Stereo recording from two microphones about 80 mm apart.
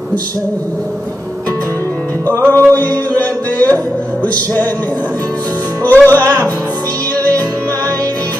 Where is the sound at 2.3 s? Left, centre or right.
Right.